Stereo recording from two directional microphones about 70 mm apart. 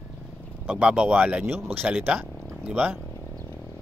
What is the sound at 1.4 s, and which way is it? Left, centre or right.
Speech, right.